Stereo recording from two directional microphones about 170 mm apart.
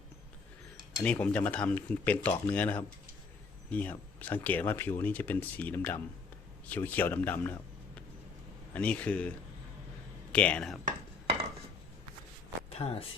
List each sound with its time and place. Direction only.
1.0 s speech: 10° left (ahead or behind)
8.7 s speech: 10° left (ahead or behind)
10.3 s speech: 5° left (ahead or behind)
12.8 s speech: 20° left (ahead or behind)